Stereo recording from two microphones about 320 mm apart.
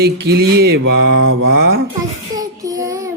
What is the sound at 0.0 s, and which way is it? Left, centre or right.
Speech, right.